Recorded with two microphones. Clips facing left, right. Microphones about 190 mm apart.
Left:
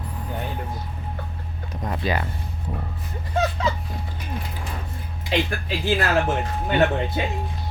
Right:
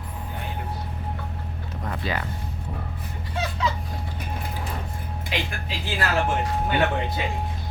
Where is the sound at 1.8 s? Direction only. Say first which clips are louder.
Left 4 dB; 15° left (ahead or behind).